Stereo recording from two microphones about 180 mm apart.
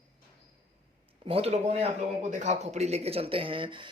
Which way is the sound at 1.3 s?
35° right (ahead or behind).